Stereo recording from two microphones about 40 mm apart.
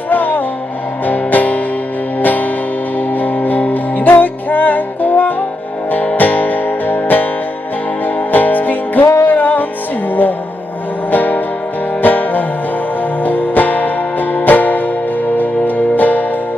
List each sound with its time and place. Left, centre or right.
0.1 s music: left
3.2 s music: left
8.3 s music: left
11.1 s music: left